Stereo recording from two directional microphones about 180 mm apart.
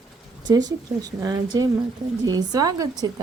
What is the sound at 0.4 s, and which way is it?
Speech, 20° right (ahead or behind).